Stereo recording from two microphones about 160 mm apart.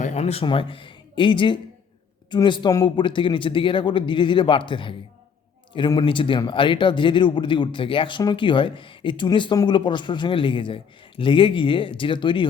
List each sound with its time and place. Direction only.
0.0 s speech: 45° left (ahead or behind)